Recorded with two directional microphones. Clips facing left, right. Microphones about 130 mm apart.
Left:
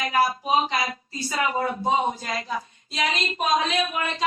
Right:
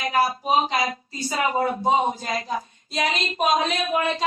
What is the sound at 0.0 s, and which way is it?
Speech, 30° right (ahead or behind).